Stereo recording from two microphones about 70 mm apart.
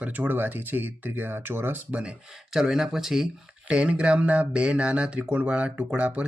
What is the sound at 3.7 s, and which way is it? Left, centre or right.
Speech, centre.